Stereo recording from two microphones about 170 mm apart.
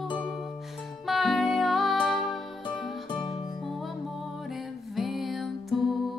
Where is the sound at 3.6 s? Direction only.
Centre (ahead or behind).